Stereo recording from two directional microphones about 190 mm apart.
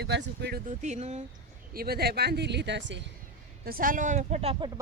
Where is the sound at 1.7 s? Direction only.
55° right (ahead or behind).